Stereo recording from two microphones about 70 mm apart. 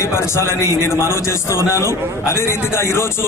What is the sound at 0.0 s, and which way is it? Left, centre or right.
A man's voice, left.